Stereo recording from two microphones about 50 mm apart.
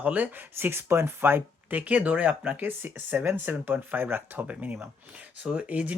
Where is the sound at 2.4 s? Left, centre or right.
Right.